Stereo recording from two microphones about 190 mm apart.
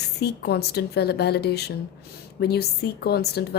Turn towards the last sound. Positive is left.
turn(degrees=55)  # may be behind; listen again after turning